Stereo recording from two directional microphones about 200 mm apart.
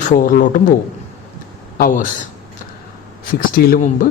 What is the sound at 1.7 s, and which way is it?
Speech, 50° left (ahead or behind).